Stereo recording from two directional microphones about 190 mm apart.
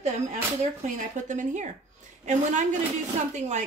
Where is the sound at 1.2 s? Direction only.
40° right (ahead or behind).